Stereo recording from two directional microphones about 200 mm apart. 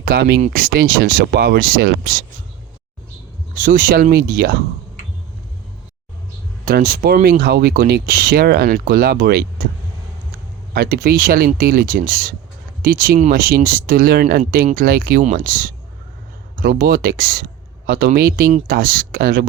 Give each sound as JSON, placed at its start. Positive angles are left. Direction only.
{"t": 0.0, "sound": "speech", "side_deg": -50}
{"t": 3.5, "sound": "speech", "side_deg": -45}
{"t": 6.7, "sound": "speech", "side_deg": -50}
{"t": 10.8, "sound": "speech", "side_deg": -50}